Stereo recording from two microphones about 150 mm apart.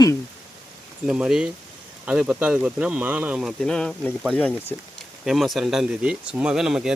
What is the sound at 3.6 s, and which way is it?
Speech, 5° left (ahead or behind).